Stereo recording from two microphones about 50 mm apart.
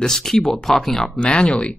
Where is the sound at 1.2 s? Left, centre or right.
Centre.